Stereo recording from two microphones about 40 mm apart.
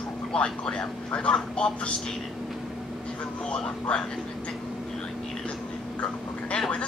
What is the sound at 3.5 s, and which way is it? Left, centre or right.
Speech, left.